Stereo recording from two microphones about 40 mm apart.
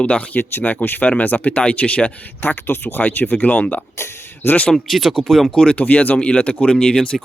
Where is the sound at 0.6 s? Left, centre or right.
Left.